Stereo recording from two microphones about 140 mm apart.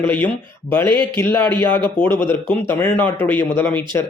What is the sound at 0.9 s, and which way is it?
Speech, 35° right (ahead or behind).